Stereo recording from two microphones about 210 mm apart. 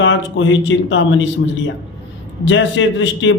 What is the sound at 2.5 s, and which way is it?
Speech, 60° left (ahead or behind).